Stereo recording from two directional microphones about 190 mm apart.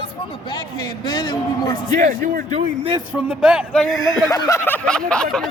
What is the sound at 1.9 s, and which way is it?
Speech, 45° right (ahead or behind).